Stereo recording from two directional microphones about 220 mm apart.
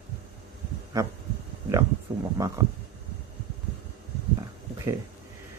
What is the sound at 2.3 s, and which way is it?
Speech, 15° right (ahead or behind).